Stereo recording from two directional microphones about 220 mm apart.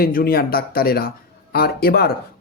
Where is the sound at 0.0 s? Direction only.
40° left (ahead or behind).